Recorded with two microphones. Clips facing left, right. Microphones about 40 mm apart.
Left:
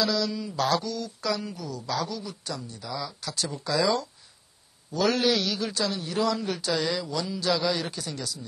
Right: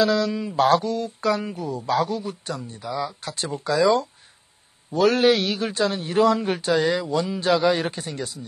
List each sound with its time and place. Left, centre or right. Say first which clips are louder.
0.0 s speech: right 6 dB; right